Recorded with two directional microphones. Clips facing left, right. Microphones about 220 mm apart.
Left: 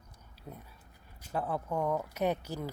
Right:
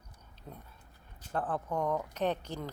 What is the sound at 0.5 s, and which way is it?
A woman's voice, 5° left (ahead or behind).